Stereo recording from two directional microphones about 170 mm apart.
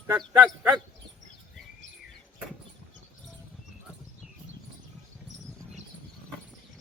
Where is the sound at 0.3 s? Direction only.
5° right (ahead or behind).